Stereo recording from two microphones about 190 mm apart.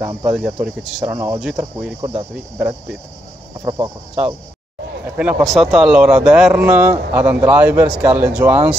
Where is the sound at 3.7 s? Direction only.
25° right (ahead or behind).